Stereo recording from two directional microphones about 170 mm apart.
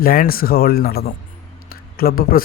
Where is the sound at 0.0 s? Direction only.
60° left (ahead or behind).